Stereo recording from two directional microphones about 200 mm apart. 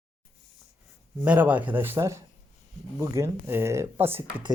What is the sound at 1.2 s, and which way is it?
Speech, 10° right (ahead or behind).